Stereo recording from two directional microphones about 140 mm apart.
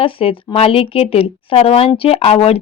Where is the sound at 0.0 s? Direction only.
40° left (ahead or behind).